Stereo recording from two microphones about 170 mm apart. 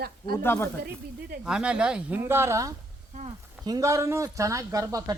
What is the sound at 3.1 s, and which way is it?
Speech, 45° right (ahead or behind).